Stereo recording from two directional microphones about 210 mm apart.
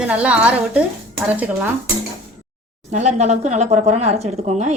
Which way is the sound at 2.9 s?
35° right (ahead or behind).